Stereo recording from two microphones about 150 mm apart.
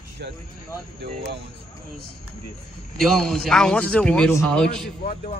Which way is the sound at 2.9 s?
Centre (ahead or behind).